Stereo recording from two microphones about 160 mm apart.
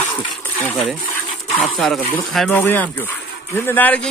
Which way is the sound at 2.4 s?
15° left (ahead or behind).